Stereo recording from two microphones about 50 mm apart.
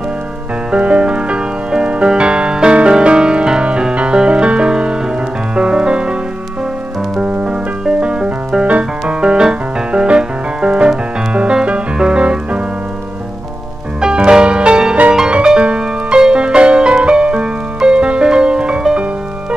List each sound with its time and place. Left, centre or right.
0.7 s music: right
7.4 s music: centre
14.0 s music: centre